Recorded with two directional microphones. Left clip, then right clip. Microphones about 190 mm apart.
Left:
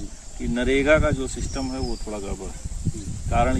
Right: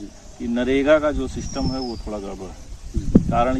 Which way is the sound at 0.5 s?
5° right (ahead or behind).